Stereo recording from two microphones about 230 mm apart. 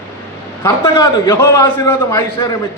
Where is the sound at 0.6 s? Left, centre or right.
Centre.